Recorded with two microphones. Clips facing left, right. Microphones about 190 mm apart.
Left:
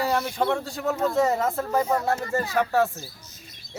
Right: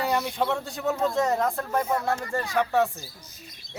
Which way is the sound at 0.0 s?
Centre (ahead or behind).